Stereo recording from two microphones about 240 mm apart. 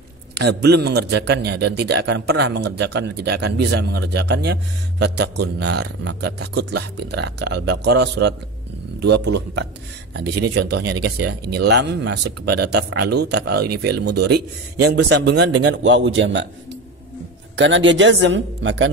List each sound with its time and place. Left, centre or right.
0.3 s a man's voice: right
10.4 s a man's voice: right
17.6 s a man's voice: right